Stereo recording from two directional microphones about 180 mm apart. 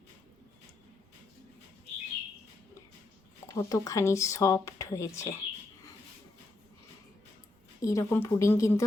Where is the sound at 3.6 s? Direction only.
15° left (ahead or behind).